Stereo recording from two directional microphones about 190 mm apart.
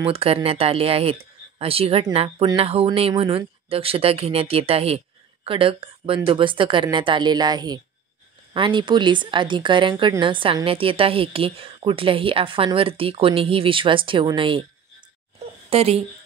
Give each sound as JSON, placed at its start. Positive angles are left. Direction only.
{"t": 0.0, "sound": "speech", "side_deg": -30}
{"t": 15.7, "sound": "speech", "side_deg": -30}